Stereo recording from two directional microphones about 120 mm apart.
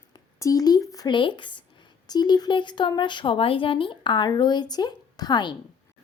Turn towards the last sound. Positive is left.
turn(degrees=35)  # may be behind; listen again after turning